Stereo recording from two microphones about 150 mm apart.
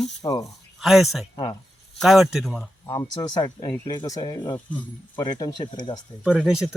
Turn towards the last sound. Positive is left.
turn(degrees=-5)  # may be behind; listen again after turning